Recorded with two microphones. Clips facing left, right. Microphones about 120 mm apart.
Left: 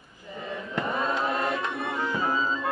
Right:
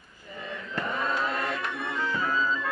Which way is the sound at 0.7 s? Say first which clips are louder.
Left 2 dB; 20° left (ahead or behind).